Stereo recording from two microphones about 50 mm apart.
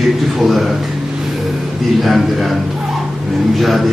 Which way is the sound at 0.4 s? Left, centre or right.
Centre.